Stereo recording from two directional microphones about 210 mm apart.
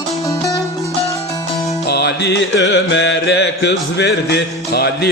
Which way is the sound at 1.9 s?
55° left (ahead or behind).